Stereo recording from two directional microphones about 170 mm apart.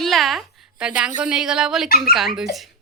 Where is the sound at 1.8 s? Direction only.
60° left (ahead or behind).